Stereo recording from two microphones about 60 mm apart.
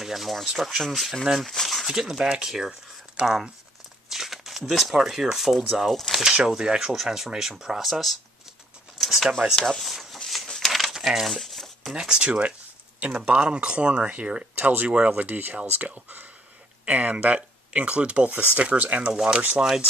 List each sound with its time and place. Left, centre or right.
0.0 s speech: centre
6.2 s speech: centre
9.0 s a sound: centre
11.9 s speech: centre; by 15.0 s right
15.0 s speech: centre
15.2 s speech: right